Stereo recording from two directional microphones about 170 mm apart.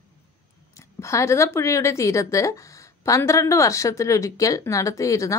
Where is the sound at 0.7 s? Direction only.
15° left (ahead or behind).